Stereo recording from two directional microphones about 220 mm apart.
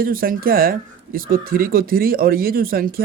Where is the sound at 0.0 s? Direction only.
40° right (ahead or behind).